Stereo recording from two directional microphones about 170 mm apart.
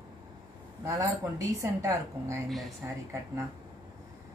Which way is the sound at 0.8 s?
20° right (ahead or behind).